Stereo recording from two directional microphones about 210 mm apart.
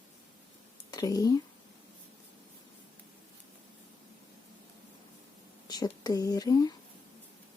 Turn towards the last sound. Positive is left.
turn(degrees=20)  # may be behind; listen again after turning